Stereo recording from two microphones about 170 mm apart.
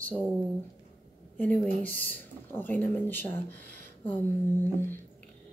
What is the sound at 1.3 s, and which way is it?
Speech, 10° left (ahead or behind).